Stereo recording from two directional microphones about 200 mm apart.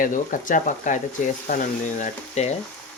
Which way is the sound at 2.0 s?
35° left (ahead or behind).